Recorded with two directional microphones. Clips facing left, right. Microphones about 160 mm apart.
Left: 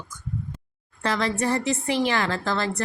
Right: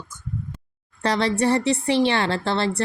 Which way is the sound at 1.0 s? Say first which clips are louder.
Right 4 dB; 35° right (ahead or behind).